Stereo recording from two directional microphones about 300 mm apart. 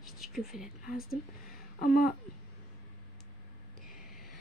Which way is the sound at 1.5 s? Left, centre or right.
Left.